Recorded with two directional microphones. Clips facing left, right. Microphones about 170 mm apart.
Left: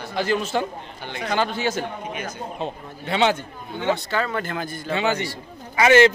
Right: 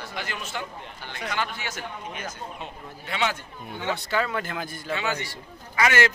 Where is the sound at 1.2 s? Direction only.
30° left (ahead or behind).